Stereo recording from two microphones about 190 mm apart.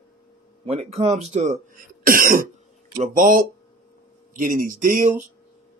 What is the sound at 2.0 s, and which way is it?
Cough, 45° right (ahead or behind).